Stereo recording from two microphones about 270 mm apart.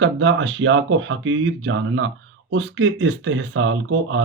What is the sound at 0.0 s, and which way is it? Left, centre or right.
Speech, right.